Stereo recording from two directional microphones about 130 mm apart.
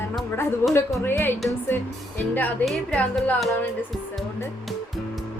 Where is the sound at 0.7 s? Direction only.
20° left (ahead or behind).